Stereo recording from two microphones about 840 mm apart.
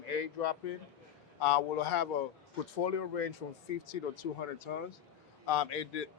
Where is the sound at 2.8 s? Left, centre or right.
Left.